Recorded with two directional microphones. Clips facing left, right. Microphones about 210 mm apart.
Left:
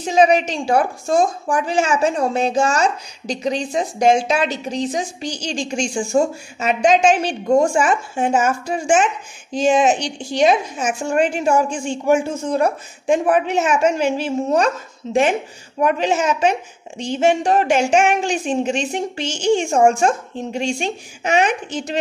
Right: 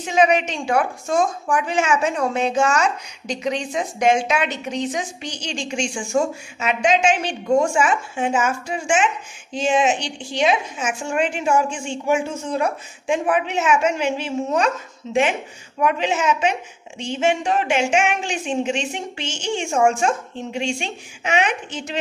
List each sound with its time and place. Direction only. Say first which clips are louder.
0.0 s a woman's voice: left 3 dB; 35° left (ahead or behind)